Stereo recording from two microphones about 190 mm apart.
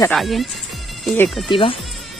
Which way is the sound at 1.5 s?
25° left (ahead or behind).